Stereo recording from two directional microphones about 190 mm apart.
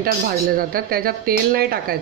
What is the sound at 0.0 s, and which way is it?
Speech, 50° right (ahead or behind).